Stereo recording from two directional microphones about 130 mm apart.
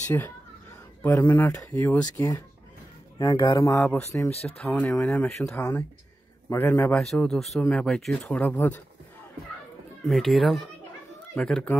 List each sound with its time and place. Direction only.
0.1 s speech: 25° left (ahead or behind)
1.7 s speech: 15° left (ahead or behind)
3.2 s speech: 30° left (ahead or behind)
3.8 s speech: 15° left (ahead or behind)
4.3 s speech: 50° left (ahead or behind)
4.6 s speech: 10° left (ahead or behind)
5.6 s speech: 20° left (ahead or behind)
7.0 s speech: 5° left (ahead or behind)
10.0 s speech: centre (ahead or behind)